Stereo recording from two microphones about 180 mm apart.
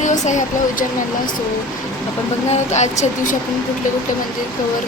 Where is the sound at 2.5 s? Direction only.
40° left (ahead or behind).